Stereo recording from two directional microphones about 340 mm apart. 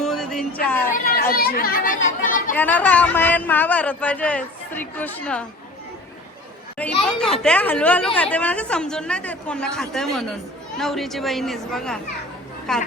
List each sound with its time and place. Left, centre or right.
0.0 s music: centre
0.9 s a child's voice: left
2.6 s a woman's voice: centre
6.7 s a woman's voice: centre